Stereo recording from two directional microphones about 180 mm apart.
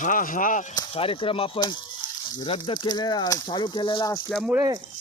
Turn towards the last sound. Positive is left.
turn(degrees=-10)  # may be behind; listen again after turning